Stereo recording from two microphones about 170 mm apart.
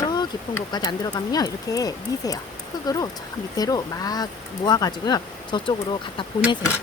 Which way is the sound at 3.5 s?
20° left (ahead or behind).